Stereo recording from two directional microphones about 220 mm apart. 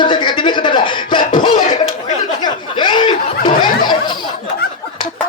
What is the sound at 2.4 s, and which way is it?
Chuckle, 20° left (ahead or behind).